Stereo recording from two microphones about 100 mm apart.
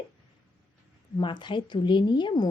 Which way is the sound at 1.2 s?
50° left (ahead or behind).